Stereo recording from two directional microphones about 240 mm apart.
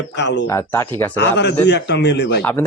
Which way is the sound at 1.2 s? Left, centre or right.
Left.